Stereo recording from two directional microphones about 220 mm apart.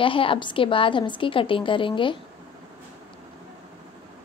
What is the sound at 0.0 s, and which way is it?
A woman's voice, 25° left (ahead or behind).